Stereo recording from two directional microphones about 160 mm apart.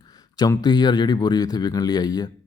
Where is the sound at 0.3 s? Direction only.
25° left (ahead or behind).